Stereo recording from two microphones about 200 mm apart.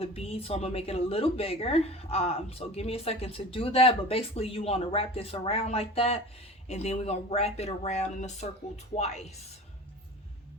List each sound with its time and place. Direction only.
0.0 s speech: 30° left (ahead or behind)